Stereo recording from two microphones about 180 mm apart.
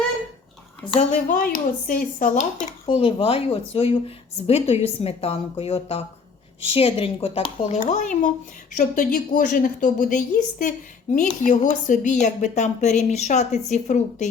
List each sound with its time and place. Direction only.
0.9 s a woman's voice: 45° left (ahead or behind)
3.0 s a woman's voice: 30° left (ahead or behind)
7.8 s a woman's voice: 45° left (ahead or behind)